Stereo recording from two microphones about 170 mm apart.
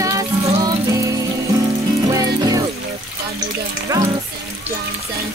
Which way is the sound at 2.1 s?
20° right (ahead or behind).